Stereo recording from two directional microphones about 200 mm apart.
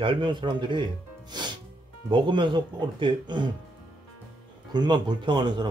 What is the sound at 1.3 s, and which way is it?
Music, 20° right (ahead or behind).